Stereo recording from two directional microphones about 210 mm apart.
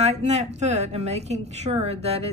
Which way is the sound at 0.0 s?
30° right (ahead or behind).